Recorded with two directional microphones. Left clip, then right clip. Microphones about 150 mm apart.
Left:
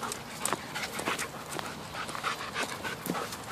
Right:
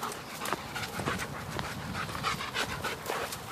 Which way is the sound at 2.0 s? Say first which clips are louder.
Even; 25° right (ahead or behind).